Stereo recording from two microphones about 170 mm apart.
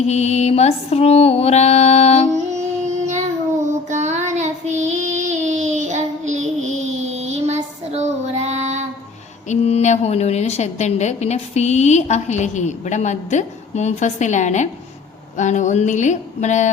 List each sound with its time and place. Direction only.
0.0 s a woman's voice: 40° left (ahead or behind)
2.6 s child singing: 45° right (ahead or behind)
9.5 s a woman's voice: 40° left (ahead or behind)